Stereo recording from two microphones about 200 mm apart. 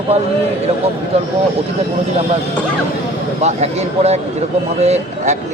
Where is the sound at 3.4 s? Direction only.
35° right (ahead or behind).